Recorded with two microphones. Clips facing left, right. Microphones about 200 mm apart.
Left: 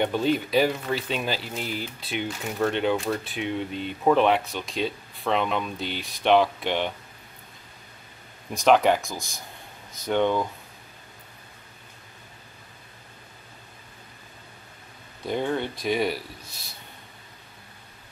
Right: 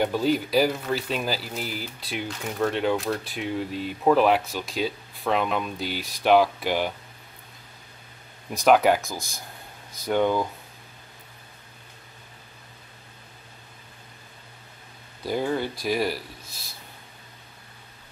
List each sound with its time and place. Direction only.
0.0 s speech: centre (ahead or behind)
8.5 s speech: 5° right (ahead or behind)
15.2 s speech: 5° right (ahead or behind)